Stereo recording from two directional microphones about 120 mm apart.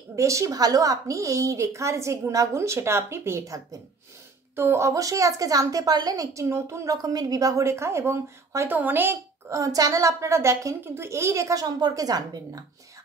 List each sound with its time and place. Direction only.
0.1 s a woman's voice: 25° right (ahead or behind)
9.6 s a woman's voice: 30° right (ahead or behind)